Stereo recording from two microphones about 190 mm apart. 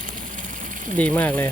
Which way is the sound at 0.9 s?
5° left (ahead or behind).